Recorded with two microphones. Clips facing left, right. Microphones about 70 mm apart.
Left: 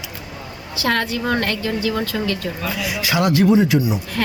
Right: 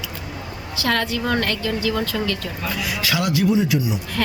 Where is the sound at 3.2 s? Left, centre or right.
Left.